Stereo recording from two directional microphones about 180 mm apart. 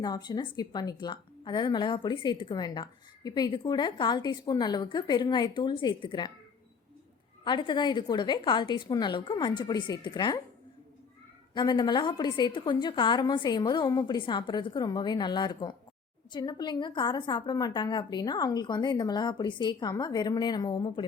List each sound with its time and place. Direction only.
0.0 s a woman's voice: 25° left (ahead or behind)
7.4 s a woman's voice: 25° left (ahead or behind)
11.5 s a woman's voice: 25° left (ahead or behind)